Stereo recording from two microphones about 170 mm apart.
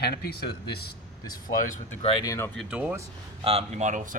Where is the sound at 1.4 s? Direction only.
55° left (ahead or behind).